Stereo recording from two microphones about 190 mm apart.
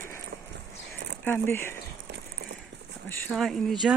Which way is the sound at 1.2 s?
10° left (ahead or behind).